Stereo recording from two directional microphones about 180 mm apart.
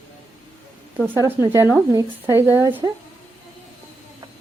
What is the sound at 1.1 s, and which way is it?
Speech, 15° right (ahead or behind).